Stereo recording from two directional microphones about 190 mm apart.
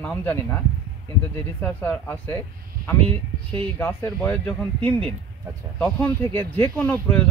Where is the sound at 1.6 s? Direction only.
10° left (ahead or behind).